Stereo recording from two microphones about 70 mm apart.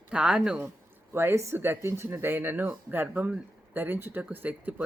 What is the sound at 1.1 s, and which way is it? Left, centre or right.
Speech, right.